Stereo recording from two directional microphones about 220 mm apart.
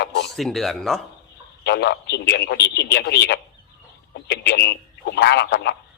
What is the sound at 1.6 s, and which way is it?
Speech, 50° left (ahead or behind).